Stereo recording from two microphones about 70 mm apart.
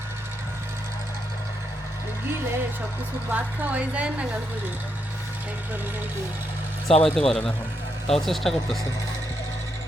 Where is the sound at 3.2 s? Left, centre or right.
Right.